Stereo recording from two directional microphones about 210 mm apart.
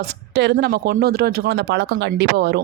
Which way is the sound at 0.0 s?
50° right (ahead or behind).